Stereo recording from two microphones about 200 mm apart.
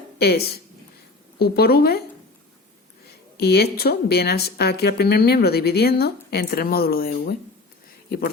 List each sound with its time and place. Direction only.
0.2 s speech: 55° left (ahead or behind)
3.3 s speech: 55° left (ahead or behind)